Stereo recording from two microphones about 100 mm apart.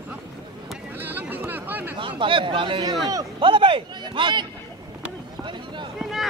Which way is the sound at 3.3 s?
55° right (ahead or behind).